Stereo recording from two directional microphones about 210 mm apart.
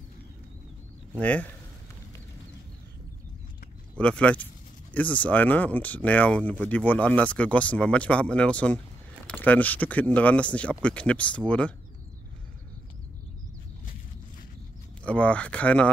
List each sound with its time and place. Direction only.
1.1 s speech: 5° left (ahead or behind)
4.0 s speech: 5° left (ahead or behind)
15.0 s speech: 5° left (ahead or behind)